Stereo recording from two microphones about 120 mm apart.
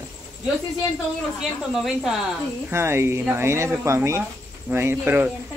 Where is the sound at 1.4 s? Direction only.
Centre (ahead or behind).